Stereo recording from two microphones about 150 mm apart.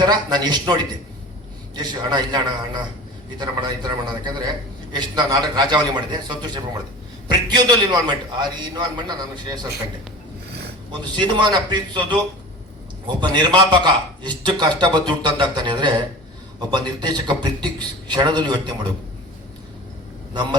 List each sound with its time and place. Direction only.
0.0 s a man's voice: 30° right (ahead or behind)
10.9 s a man's voice: 30° right (ahead or behind)
20.3 s a man's voice: 30° right (ahead or behind)